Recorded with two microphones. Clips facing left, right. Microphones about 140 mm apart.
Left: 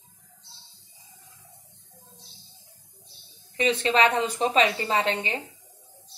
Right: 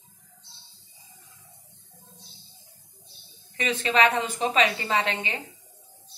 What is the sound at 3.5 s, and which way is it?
A woman's voice, 30° left (ahead or behind).